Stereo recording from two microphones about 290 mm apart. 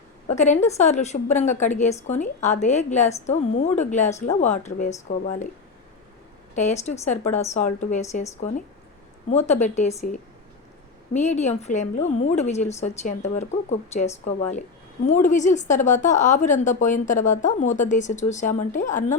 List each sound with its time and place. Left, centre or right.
0.3 s a woman's voice: left
6.6 s a woman's voice: left